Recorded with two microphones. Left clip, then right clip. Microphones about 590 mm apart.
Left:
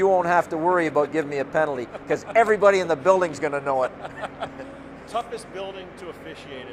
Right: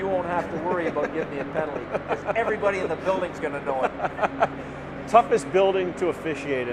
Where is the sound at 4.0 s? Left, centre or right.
Right.